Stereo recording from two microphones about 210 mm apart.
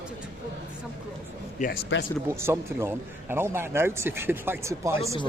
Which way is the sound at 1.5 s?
40° left (ahead or behind).